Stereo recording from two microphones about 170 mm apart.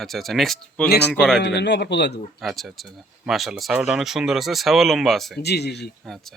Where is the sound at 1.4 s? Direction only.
90° left.